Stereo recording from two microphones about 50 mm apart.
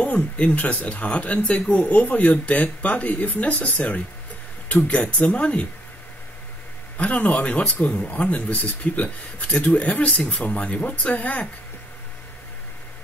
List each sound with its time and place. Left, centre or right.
0.0 s speech: left
7.0 s speech: left